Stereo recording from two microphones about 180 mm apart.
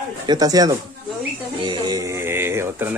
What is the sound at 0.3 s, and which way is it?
Speech, 20° right (ahead or behind).